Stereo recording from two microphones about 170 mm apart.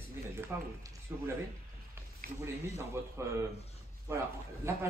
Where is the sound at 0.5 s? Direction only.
15° right (ahead or behind).